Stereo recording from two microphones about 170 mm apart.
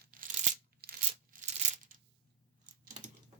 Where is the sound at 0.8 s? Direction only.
60° right (ahead or behind).